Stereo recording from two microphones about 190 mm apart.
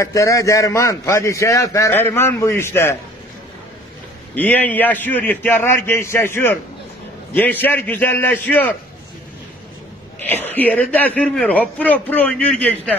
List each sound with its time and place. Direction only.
0.0 s a man's voice: 15° left (ahead or behind)
4.4 s a man's voice: 10° left (ahead or behind)
10.2 s a man's voice: 10° left (ahead or behind)